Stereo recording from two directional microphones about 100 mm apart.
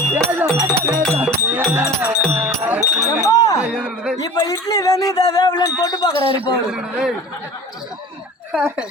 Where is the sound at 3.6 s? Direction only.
10° right (ahead or behind).